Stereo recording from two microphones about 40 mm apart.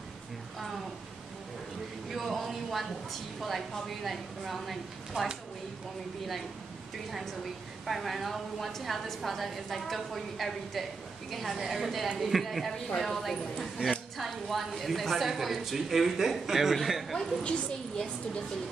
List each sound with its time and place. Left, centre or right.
2.0 s a sound: centre
2.4 s a woman's voice: centre
7.8 s a woman's voice: centre
12.7 s a woman's voice: centre
17.4 s a woman's voice: left